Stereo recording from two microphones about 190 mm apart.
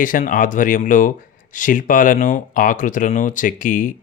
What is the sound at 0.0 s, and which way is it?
Speech, 45° left (ahead or behind).